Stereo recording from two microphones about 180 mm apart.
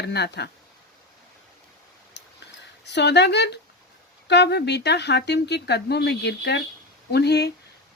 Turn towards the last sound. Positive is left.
turn(degrees=65)  # may be behind; listen again after turning